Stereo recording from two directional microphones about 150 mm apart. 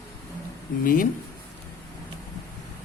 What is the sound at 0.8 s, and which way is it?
Speech, 70° left (ahead or behind).